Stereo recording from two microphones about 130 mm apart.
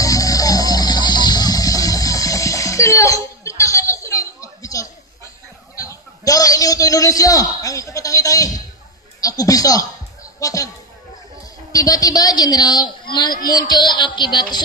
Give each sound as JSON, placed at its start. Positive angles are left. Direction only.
{"t": 0.0, "sound": "music", "side_deg": 25}
{"t": 5.8, "sound": "a sound", "side_deg": 25}
{"t": 9.2, "sound": "a man's voice", "side_deg": 30}
{"t": 11.7, "sound": "a woman's voice", "side_deg": 25}